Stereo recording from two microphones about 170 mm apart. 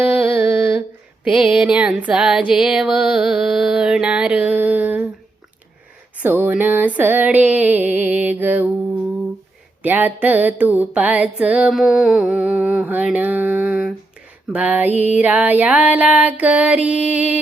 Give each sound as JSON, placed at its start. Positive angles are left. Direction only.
{"t": 0.0, "sound": "a sound", "side_deg": -10}
{"t": 1.4, "sound": "music", "side_deg": -5}
{"t": 6.2, "sound": "music", "side_deg": -10}
{"t": 9.8, "sound": "music", "side_deg": -10}